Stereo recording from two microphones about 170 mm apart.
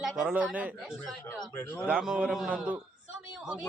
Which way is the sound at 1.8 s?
5° right (ahead or behind).